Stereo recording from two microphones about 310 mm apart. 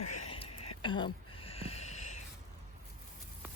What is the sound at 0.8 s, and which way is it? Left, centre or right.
Whispering, centre.